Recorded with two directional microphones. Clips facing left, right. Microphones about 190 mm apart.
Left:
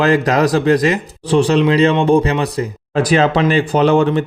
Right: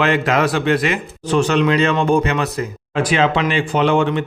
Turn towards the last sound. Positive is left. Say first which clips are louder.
# left 3 dB
turn(degrees=40)  # may be behind; listen again after turning